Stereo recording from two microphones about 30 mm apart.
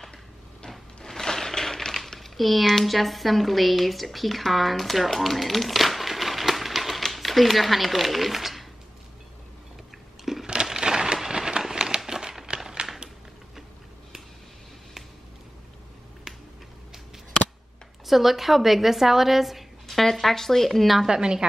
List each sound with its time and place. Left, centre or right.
1.0 s a sound: centre
7.1 s speech: centre
10.4 s crushing: right
11.1 s a sound: centre
18.0 s a woman's voice: centre
20.0 s speech: centre
20.8 s a woman's voice: centre
21.1 s a woman's voice: right